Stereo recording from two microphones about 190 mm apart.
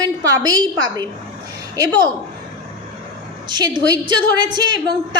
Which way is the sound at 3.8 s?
20° right (ahead or behind).